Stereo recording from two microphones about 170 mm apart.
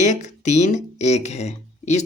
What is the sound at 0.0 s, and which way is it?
Speech, 45° left (ahead or behind).